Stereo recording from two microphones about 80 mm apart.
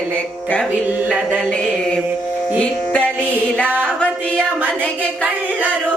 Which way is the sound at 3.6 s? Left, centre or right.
Right.